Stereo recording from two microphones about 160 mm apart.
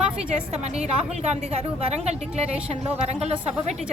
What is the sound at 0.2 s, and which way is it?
Speech, 40° right (ahead or behind).